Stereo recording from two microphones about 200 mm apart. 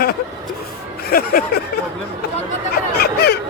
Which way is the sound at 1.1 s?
50° left (ahead or behind).